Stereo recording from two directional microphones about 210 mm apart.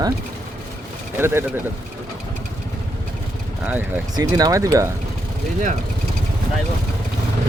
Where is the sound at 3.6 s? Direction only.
10° right (ahead or behind).